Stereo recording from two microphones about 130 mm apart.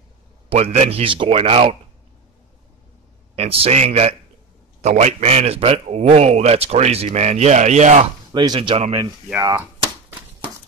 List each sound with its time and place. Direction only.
0.5 s speech: 55° right (ahead or behind)
3.3 s a man's voice: 50° right (ahead or behind); by 8.1 s 65° right (ahead or behind)
8.3 s speech: 40° right (ahead or behind)